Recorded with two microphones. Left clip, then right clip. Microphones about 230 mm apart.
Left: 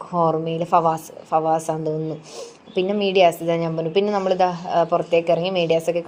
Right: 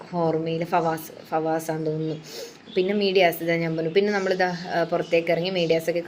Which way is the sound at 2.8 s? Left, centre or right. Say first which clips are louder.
Left 3 dB; left.